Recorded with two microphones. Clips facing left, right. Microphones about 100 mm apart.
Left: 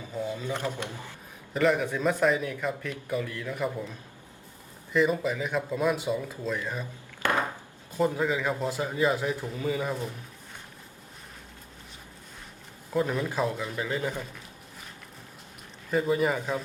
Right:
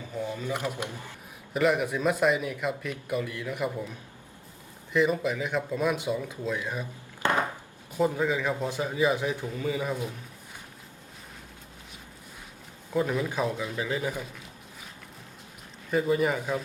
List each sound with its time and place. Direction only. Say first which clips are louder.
0.4 s a man's voice: even; 15° right (ahead or behind)
4.9 s a man's voice: even; centre (ahead or behind)
7.2 s chopping: right 1 dB; 20° right (ahead or behind)
7.9 s a man's voice: even; centre (ahead or behind)
12.9 s a man's voice: even; centre (ahead or behind)
15.9 s a man's voice: even; centre (ahead or behind)